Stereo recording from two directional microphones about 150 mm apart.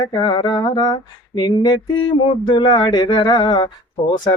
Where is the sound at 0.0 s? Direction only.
30° left (ahead or behind).